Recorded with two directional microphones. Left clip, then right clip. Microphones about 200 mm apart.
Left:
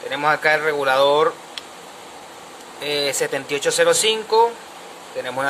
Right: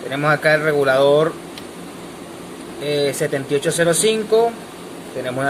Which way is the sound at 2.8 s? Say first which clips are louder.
Right 2 dB; 25° left (ahead or behind).